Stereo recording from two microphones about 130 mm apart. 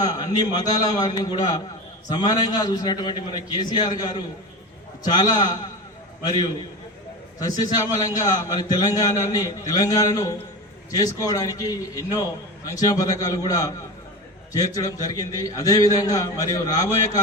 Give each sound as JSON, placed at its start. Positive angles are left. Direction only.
{"t": 0.0, "sound": "a man's voice", "side_deg": 30}
{"t": 7.3, "sound": "a man's voice", "side_deg": 30}